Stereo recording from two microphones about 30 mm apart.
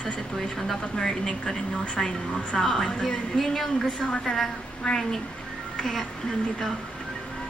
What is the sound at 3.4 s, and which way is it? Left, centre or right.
Speech, centre.